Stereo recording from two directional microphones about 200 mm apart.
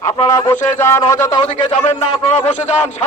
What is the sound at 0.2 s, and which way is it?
A man's voice, 20° left (ahead or behind).